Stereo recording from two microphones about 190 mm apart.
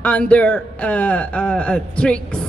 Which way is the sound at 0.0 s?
5° left (ahead or behind).